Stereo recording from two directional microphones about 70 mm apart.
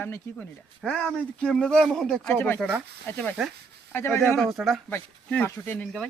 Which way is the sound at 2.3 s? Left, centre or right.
Left.